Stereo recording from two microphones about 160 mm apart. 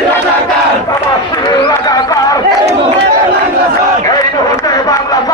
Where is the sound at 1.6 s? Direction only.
25° left (ahead or behind).